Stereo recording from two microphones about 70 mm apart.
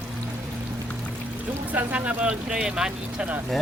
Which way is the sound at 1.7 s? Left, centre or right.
Right.